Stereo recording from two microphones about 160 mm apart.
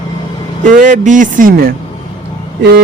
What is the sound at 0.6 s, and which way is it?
Speech, 50° right (ahead or behind).